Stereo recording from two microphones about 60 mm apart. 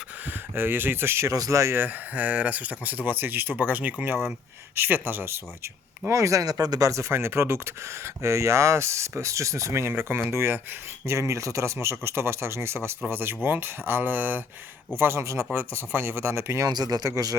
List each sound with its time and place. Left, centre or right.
0.3 s speech: right
1.3 s speech: right
1.7 s speech: right
6.1 s speech: right
9.9 s speech: right
11.0 s speech: right
15.2 s speech: right
15.5 s speech: right
16.6 s speech: right